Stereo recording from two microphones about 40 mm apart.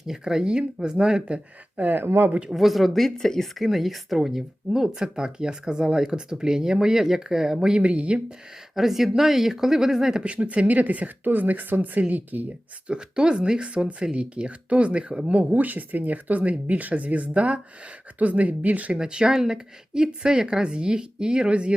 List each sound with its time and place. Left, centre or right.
0.1 s speech: centre
1.2 s speech: right
1.8 s speech: right
2.0 s speech: right
2.5 s speech: centre
3.4 s speech: centre
7.8 s speech: right
8.7 s speech: centre
10.2 s speech: right
12.9 s speech: right
15.5 s speech: right
18.9 s speech: centre